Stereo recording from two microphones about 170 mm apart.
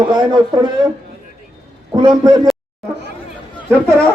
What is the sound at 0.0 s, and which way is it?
Speech, 25° right (ahead or behind).